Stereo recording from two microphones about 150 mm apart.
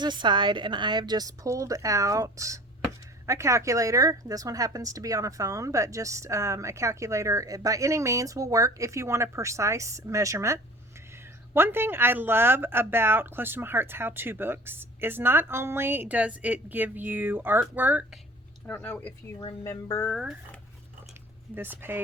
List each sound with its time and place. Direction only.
0.0 s speech: 30° right (ahead or behind); by 18.2 s 10° right (ahead or behind)
18.6 s speech: 10° left (ahead or behind)
19.6 s music: 20° left (ahead or behind)
20.1 s speech: 5° left (ahead or behind)
21.5 s speech: 15° right (ahead or behind)